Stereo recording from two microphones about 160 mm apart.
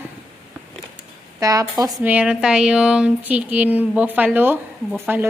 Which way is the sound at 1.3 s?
20° right (ahead or behind).